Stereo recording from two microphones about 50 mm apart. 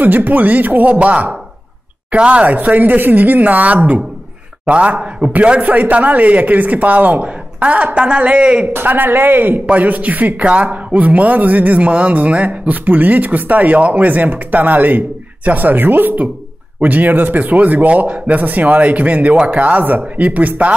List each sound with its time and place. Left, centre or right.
0.0 s speech: right
8.7 s speech: right